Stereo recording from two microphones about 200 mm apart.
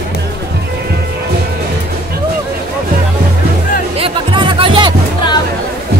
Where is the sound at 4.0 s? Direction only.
25° right (ahead or behind).